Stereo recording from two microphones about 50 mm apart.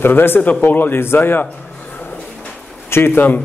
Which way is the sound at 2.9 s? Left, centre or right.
Left.